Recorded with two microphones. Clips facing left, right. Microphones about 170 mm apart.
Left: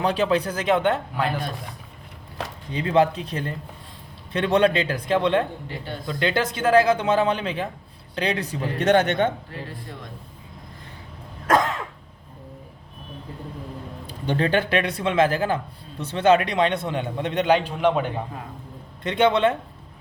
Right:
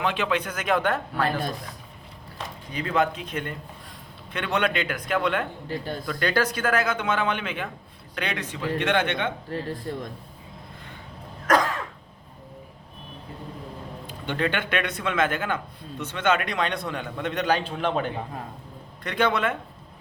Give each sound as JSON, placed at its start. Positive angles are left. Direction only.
{"t": 0.0, "sound": "speech", "side_deg": 35}
{"t": 2.7, "sound": "speech", "side_deg": 30}
{"t": 5.6, "sound": "a man's voice", "side_deg": -40}
{"t": 6.1, "sound": "speech", "side_deg": 25}
{"t": 11.4, "sound": "cough", "side_deg": 25}
{"t": 14.1, "sound": "speech", "side_deg": 35}
{"t": 19.0, "sound": "speech", "side_deg": 25}